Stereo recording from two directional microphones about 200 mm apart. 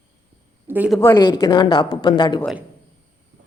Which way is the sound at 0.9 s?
10° left (ahead or behind).